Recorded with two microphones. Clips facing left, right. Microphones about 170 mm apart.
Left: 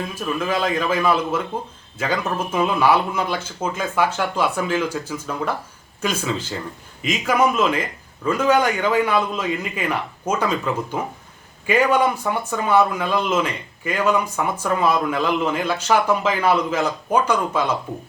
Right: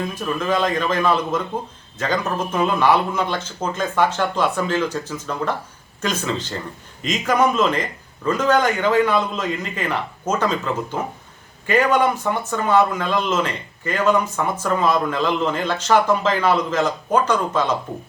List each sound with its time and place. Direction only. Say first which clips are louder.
0.1 s speech: right 1 dB; 10° left (ahead or behind)
11.6 s speech: even; 10° left (ahead or behind)